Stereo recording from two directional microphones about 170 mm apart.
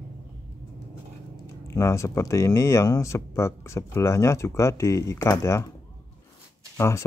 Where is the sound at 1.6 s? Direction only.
15° left (ahead or behind).